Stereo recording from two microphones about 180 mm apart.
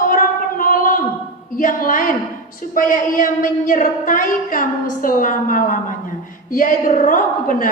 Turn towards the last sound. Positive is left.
turn(degrees=50)  # may be behind; listen again after turning